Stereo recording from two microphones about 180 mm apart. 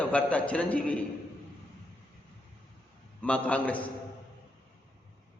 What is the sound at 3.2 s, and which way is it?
Speech, 5° left (ahead or behind).